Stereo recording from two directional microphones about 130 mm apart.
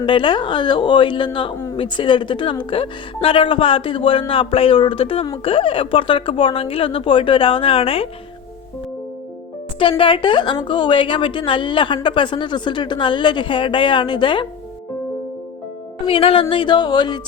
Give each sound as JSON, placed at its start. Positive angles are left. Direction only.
{"t": 0.0, "sound": "a woman's voice", "side_deg": 40}
{"t": 10.0, "sound": "a woman's voice", "side_deg": 40}
{"t": 16.0, "sound": "a woman's voice", "side_deg": 45}